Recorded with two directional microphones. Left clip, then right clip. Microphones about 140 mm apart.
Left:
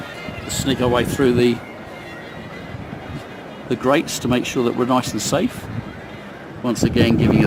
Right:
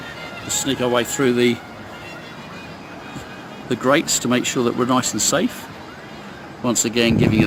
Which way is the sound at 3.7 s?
5° right (ahead or behind).